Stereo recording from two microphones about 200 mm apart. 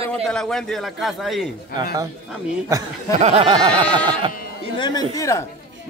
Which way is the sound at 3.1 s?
30° right (ahead or behind).